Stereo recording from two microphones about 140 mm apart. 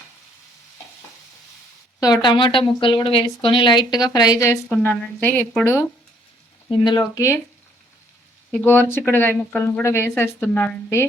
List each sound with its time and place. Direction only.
2.0 s speech: 30° left (ahead or behind)
4.8 s speech: 10° left (ahead or behind)
6.7 s speech: 30° left (ahead or behind)
8.5 s speech: 15° left (ahead or behind)